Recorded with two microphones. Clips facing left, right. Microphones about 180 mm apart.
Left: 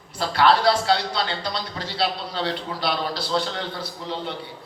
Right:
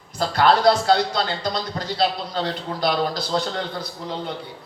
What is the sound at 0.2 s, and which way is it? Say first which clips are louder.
A man's voice: right 1 dB; 45° right (ahead or behind).